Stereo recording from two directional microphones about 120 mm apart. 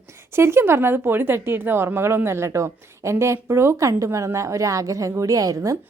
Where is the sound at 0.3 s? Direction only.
20° right (ahead or behind).